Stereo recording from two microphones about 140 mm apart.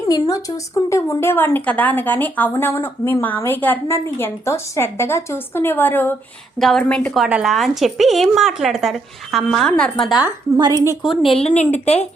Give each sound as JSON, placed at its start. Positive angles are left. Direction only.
{"t": 0.1, "sound": "a woman's voice", "side_deg": 25}
{"t": 6.6, "sound": "speech", "side_deg": 5}
{"t": 10.6, "sound": "a woman's voice", "side_deg": -25}
{"t": 11.0, "sound": "speech", "side_deg": 0}
{"t": 11.3, "sound": "speech", "side_deg": 50}